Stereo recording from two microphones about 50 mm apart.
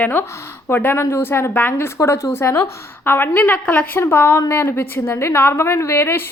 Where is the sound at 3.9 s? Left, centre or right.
Left.